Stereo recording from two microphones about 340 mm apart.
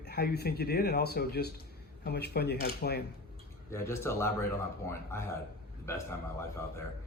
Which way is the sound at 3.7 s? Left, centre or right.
Centre.